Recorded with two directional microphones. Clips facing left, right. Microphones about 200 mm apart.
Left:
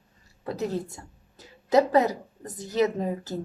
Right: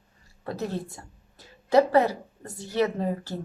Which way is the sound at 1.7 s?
20° left (ahead or behind).